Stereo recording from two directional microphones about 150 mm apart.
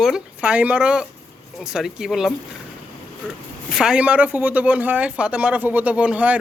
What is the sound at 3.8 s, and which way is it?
Speech, 5° right (ahead or behind).